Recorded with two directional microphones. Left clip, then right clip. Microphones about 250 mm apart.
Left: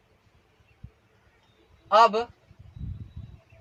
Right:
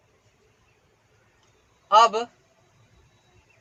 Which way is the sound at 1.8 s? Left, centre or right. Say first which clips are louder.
Right 2 dB; centre.